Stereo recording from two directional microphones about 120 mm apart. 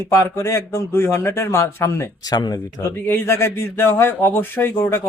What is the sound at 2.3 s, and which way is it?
Speech, 35° left (ahead or behind).